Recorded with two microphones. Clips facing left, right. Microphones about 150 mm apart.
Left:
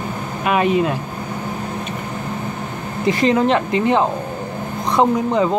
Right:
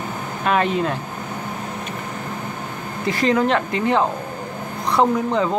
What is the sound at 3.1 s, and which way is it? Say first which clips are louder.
Speech: left 3 dB; 20° left (ahead or behind).